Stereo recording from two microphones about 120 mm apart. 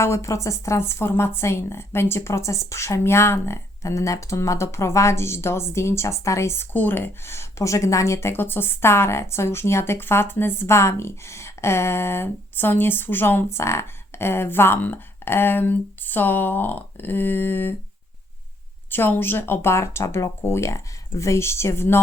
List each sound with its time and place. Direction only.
0.0 s a woman's voice: 25° left (ahead or behind)
18.9 s a woman's voice: 15° left (ahead or behind)